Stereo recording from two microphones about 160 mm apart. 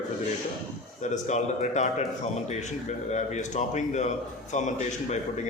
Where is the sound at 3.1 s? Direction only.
45° left (ahead or behind).